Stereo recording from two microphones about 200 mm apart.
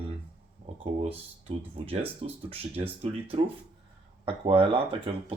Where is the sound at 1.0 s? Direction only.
30° right (ahead or behind).